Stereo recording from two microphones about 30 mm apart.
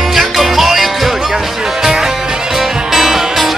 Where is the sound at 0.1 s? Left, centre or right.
Centre.